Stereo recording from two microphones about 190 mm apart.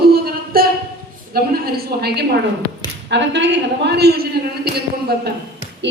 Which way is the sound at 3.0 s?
65° right (ahead or behind).